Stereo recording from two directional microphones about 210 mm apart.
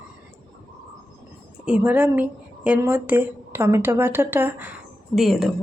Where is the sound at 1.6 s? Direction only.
5° right (ahead or behind).